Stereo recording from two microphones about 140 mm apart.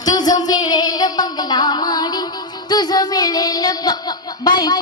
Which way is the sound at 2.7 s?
30° left (ahead or behind).